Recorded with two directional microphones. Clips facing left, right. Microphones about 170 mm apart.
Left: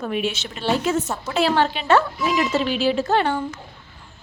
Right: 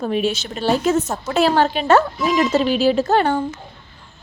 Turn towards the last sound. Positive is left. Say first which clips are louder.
# right 3 dB
turn(degrees=-45)  # may be behind; listen again after turning